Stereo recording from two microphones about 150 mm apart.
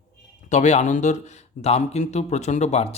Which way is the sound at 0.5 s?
50° left (ahead or behind).